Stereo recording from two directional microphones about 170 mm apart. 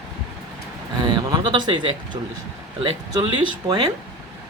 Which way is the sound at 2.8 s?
30° right (ahead or behind).